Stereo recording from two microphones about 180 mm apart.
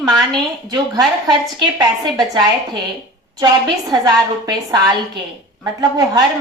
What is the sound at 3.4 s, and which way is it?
A woman's voice, 20° right (ahead or behind).